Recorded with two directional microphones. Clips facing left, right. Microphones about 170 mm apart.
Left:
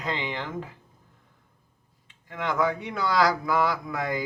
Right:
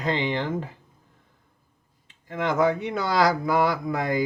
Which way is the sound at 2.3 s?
25° right (ahead or behind).